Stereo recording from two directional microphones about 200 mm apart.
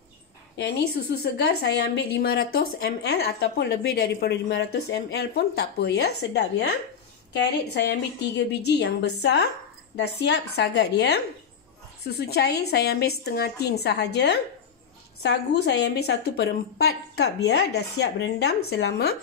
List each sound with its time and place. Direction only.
0.6 s a woman's voice: 55° left (ahead or behind)